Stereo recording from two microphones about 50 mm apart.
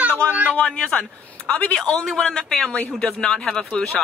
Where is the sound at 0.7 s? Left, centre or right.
Centre.